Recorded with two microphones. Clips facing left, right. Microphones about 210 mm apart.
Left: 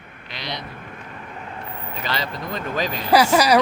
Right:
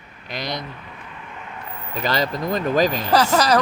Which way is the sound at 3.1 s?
10° left (ahead or behind).